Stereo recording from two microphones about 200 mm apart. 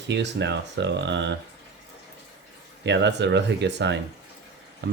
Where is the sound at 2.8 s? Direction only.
60° right (ahead or behind).